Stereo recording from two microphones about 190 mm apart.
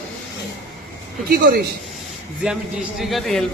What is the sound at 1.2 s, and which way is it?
Speech, 55° right (ahead or behind).